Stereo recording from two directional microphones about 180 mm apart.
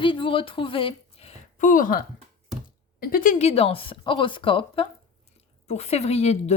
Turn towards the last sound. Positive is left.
turn(degrees=35)  # may be behind; listen again after turning